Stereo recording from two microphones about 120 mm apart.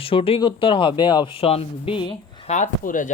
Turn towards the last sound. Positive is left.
turn(degrees=90)